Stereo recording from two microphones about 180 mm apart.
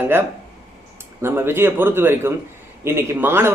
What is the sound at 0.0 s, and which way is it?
Speech, 10° right (ahead or behind).